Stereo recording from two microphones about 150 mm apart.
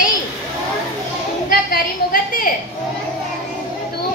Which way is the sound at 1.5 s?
70° left (ahead or behind).